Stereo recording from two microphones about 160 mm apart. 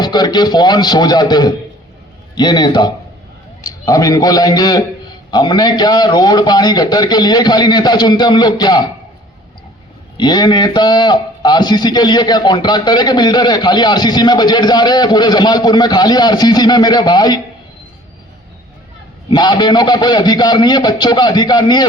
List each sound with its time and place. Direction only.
0.0 s a man's voice: 25° left (ahead or behind)
10.2 s a man's voice: 25° left (ahead or behind)
19.3 s a man's voice: 30° left (ahead or behind)